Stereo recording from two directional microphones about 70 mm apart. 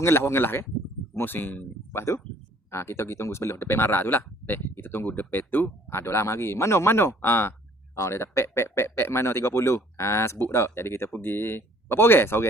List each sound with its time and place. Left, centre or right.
0.0 s speech: left